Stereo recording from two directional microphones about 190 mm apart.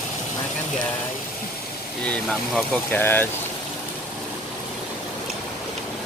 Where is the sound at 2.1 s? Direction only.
5° left (ahead or behind).